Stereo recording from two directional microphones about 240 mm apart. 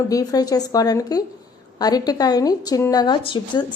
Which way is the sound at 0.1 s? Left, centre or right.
Centre.